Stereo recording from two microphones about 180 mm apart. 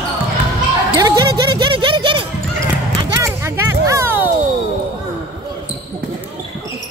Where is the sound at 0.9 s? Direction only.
20° right (ahead or behind).